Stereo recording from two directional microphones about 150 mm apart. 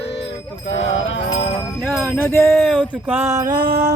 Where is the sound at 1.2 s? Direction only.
40° left (ahead or behind).